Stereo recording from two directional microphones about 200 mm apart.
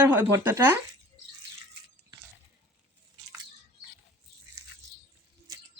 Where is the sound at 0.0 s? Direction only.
10° right (ahead or behind).